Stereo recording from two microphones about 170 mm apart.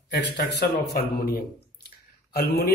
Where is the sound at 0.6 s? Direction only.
75° left (ahead or behind).